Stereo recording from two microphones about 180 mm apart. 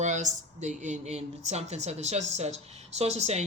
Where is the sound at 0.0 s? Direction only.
45° right (ahead or behind).